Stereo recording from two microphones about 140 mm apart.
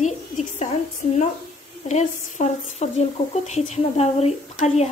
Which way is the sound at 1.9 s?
55° left (ahead or behind).